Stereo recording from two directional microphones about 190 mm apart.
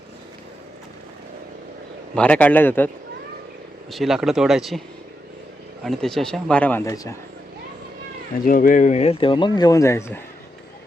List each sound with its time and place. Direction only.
2.1 s speech: 5° left (ahead or behind)
3.9 s a man's voice: centre (ahead or behind)
5.8 s a man's voice: centre (ahead or behind); by 7.2 s 15° left (ahead or behind)
8.4 s speech: 45° left (ahead or behind); by 10.2 s 15° left (ahead or behind)